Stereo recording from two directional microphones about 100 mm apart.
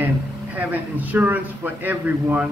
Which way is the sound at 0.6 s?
15° right (ahead or behind).